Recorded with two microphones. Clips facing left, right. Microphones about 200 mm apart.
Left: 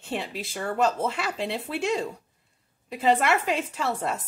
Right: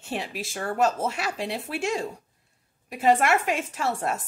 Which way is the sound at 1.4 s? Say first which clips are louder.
Left 1 dB; 20° left (ahead or behind).